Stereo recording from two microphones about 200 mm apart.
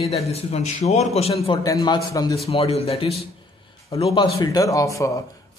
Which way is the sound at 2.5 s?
30° left (ahead or behind).